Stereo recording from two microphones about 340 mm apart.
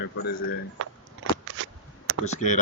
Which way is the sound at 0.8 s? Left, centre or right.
Right.